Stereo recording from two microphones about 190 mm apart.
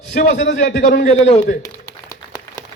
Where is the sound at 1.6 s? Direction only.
20° left (ahead or behind).